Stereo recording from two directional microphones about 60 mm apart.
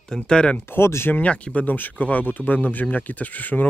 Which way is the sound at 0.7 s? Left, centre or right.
Left.